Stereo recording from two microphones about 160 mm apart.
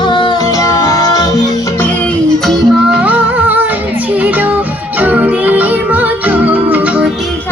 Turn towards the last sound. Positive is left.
turn(degrees=-10)  # may be behind; listen again after turning